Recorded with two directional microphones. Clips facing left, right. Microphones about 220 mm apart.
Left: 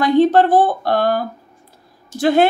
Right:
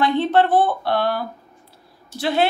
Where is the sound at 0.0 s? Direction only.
40° left (ahead or behind).